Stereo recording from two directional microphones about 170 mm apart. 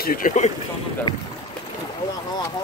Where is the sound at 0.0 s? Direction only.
55° left (ahead or behind).